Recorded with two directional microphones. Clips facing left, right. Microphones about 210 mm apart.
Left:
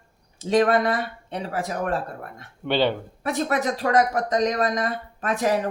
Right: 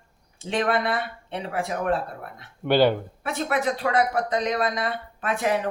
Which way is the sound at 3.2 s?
40° left (ahead or behind).